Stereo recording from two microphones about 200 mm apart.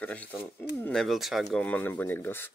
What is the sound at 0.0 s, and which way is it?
Speech, 5° left (ahead or behind).